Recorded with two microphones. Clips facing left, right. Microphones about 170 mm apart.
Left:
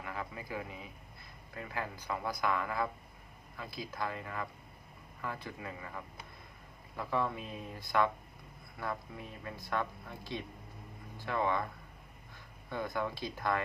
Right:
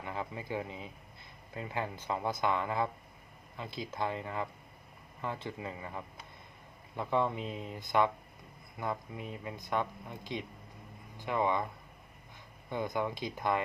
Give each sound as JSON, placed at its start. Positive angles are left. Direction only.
{"t": 0.0, "sound": "a sound", "side_deg": -25}
{"t": 1.5, "sound": "speech", "side_deg": -25}
{"t": 12.7, "sound": "speech", "side_deg": -20}